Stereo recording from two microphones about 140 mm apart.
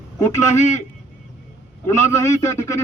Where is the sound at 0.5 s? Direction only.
55° left (ahead or behind).